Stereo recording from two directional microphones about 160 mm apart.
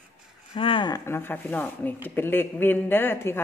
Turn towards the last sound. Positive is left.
turn(degrees=15)  # may be behind; listen again after turning